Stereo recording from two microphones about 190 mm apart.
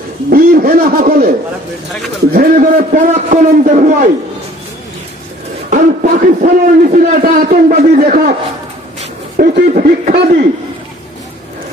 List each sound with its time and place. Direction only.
0.3 s a man's voice: 50° right (ahead or behind)
2.3 s a man's voice: 50° right (ahead or behind)
5.7 s a man's voice: 50° right (ahead or behind)
9.4 s a man's voice: 50° right (ahead or behind)